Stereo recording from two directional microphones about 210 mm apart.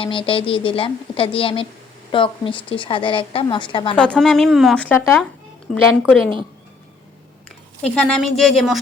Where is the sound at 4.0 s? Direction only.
5° left (ahead or behind).